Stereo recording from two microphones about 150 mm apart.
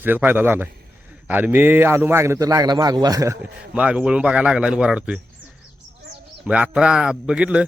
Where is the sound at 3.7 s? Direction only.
10° right (ahead or behind).